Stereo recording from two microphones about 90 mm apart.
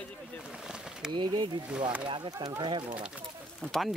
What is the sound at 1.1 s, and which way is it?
Speech, 55° right (ahead or behind).